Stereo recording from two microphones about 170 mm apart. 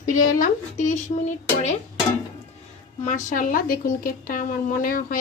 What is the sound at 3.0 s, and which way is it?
A woman's voice, 45° left (ahead or behind).